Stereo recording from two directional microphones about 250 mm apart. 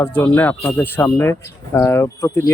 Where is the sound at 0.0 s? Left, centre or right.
Centre.